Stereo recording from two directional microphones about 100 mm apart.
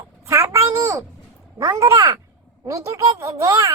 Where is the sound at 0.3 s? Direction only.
30° right (ahead or behind).